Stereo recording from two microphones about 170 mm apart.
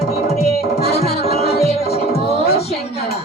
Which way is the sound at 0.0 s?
40° left (ahead or behind).